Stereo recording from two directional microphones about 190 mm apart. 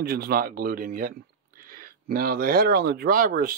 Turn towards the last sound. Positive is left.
turn(degrees=-50)  # may be behind; listen again after turning